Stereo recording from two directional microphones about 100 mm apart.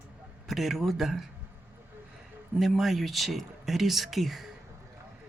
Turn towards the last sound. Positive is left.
turn(degrees=0)  # may be behind; listen again after turning